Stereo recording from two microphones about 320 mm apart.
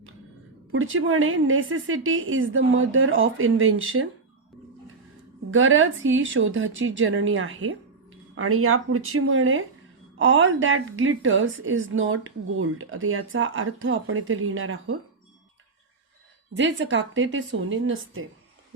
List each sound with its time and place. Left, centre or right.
0.7 s a woman's voice: right
5.5 s a woman's voice: right
16.6 s a woman's voice: right